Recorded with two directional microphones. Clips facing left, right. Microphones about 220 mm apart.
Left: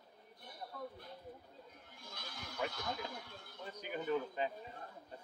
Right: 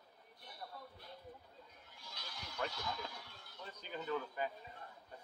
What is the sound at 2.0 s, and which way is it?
Goat, 50° left (ahead or behind).